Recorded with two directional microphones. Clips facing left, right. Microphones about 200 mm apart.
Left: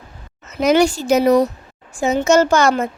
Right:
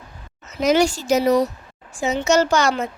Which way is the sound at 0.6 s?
60° left (ahead or behind).